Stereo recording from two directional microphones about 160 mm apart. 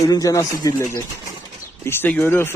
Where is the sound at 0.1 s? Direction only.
20° left (ahead or behind).